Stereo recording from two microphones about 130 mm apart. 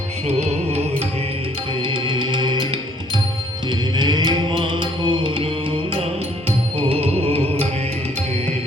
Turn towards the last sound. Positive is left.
turn(degrees=-50)  # may be behind; listen again after turning